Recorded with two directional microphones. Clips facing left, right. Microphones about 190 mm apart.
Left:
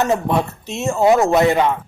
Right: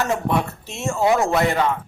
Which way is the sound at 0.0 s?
20° left (ahead or behind).